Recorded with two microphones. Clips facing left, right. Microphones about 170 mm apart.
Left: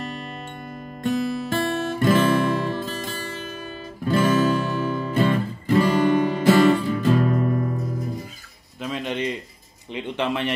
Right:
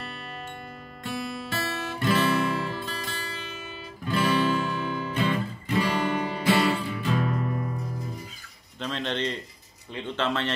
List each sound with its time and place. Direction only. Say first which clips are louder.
0.0 s music: left 7 dB; 40° left (ahead or behind)
1.0 s guitar: left 9 dB; 45° left (ahead or behind)
8.7 s a sound: left 3 dB; 10° left (ahead or behind)
9.9 s a man's voice: left 3 dB; 15° left (ahead or behind)